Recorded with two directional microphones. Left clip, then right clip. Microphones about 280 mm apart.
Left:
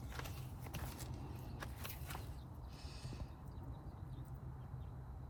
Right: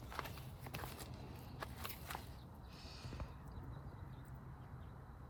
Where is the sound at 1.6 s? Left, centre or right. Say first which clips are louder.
Right 3 dB; right.